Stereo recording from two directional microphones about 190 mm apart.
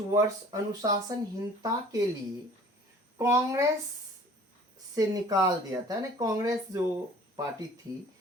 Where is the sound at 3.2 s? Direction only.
15° right (ahead or behind).